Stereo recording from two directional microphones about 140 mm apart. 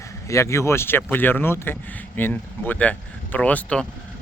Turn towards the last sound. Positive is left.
turn(degrees=10)  # may be behind; listen again after turning